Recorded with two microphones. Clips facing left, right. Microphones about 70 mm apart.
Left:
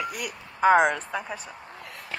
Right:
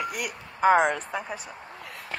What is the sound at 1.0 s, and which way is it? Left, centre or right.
Speech, right.